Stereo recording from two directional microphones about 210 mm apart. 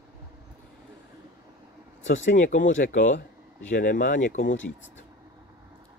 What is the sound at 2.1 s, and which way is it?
Speech, 40° left (ahead or behind).